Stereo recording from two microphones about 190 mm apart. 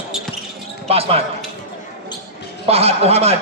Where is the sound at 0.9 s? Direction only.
30° right (ahead or behind).